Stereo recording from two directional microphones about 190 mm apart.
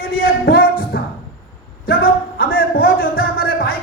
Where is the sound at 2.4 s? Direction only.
50° left (ahead or behind).